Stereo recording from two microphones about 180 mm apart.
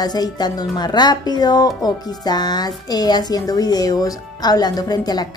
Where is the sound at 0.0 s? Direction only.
20° left (ahead or behind).